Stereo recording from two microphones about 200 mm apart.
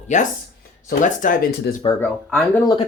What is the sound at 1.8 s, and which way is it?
Speech, 15° left (ahead or behind).